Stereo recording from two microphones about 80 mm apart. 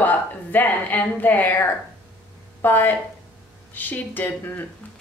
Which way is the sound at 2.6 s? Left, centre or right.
Left.